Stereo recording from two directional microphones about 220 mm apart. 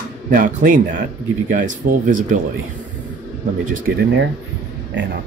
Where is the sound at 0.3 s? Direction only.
40° right (ahead or behind).